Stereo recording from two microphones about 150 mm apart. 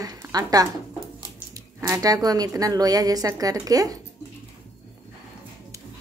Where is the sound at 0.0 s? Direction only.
25° right (ahead or behind).